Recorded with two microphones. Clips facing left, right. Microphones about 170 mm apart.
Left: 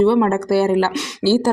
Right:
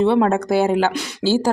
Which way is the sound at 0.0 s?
20° right (ahead or behind).